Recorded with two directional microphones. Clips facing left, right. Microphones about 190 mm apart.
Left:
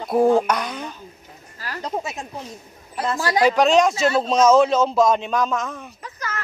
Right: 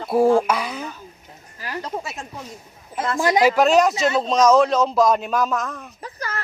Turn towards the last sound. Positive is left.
turn(degrees=-35)  # may be behind; listen again after turning